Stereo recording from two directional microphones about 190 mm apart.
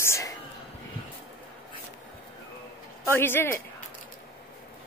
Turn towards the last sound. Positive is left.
turn(degrees=10)  # may be behind; listen again after turning